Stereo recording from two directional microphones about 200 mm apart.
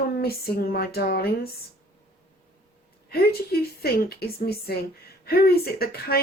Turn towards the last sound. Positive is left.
turn(degrees=50)  # may be behind; listen again after turning